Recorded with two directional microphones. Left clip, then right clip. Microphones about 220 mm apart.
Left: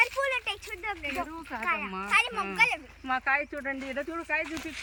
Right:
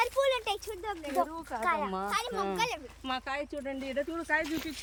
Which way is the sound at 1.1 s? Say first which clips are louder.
Right 3 dB; 20° right (ahead or behind).